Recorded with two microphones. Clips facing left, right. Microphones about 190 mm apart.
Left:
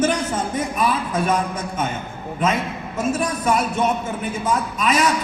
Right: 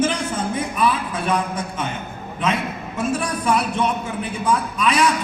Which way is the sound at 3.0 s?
40° left (ahead or behind).